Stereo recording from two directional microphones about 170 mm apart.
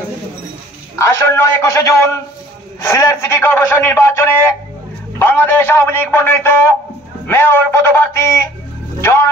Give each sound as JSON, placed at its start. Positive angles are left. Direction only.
{"t": 0.9, "sound": "a man's voice", "side_deg": 15}